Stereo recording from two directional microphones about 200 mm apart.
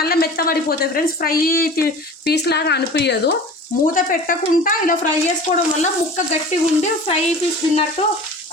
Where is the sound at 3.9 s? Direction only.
45° left (ahead or behind).